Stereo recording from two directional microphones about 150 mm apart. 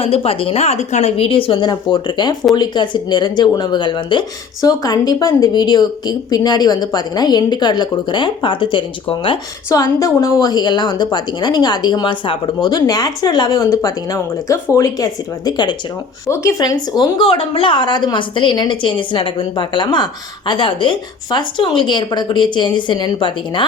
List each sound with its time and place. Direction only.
0.0 s a woman's voice: 40° left (ahead or behind)
9.6 s a woman's voice: 20° left (ahead or behind)